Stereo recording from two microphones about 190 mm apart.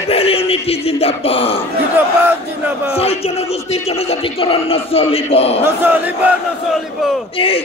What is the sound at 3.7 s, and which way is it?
Speech, 30° left (ahead or behind).